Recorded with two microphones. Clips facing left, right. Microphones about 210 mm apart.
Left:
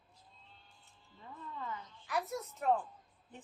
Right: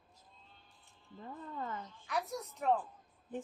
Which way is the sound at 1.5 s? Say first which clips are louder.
Right 2 dB; 45° right (ahead or behind).